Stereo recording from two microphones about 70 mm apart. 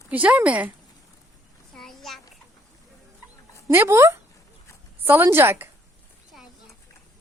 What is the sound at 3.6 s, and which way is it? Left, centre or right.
A woman's voice, right.